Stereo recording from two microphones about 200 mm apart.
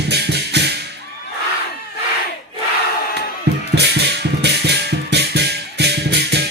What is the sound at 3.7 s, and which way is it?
Music, 55° right (ahead or behind).